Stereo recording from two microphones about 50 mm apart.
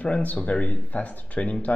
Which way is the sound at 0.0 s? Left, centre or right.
Left.